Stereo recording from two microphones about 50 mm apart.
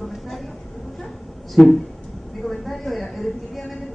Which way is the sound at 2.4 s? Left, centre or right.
Centre.